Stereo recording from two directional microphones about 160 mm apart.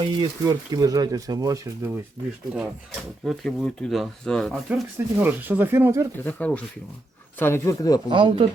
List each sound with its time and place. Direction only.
0.0 s speech: 25° right (ahead or behind)
3.2 s speech: centre (ahead or behind)
4.7 s speech: 10° right (ahead or behind)
6.1 s speech: 10° left (ahead or behind)
8.1 s speech: 30° right (ahead or behind)